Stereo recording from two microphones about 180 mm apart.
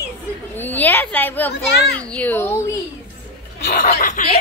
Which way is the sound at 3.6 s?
50° left (ahead or behind).